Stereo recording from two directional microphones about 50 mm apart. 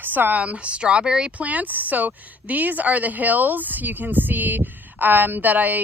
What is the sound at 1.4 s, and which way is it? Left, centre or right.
A woman's voice, right.